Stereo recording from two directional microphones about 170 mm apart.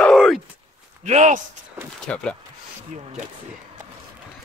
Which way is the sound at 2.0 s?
5° left (ahead or behind).